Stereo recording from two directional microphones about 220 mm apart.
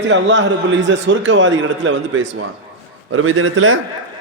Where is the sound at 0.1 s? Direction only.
55° right (ahead or behind).